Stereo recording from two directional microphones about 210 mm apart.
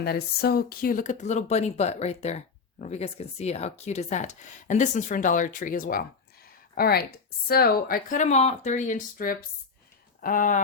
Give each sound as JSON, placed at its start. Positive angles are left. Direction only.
{"t": 0.0, "sound": "a woman's voice", "side_deg": 50}